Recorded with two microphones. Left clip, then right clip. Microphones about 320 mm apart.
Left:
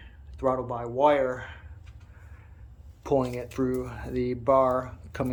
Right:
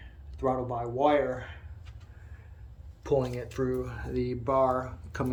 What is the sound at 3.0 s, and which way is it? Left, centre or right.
Speech, centre.